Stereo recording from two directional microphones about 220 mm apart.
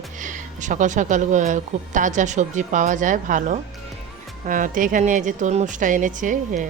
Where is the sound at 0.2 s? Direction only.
35° right (ahead or behind).